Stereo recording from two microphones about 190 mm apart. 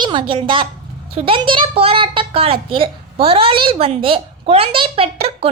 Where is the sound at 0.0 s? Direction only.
25° right (ahead or behind).